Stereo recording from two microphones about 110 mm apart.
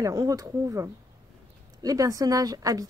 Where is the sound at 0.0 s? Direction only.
30° right (ahead or behind).